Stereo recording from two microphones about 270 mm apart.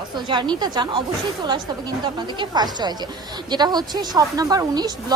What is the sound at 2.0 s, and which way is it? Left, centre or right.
Speech, centre.